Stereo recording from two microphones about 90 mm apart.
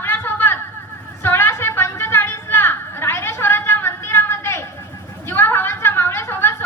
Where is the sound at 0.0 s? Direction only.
20° left (ahead or behind).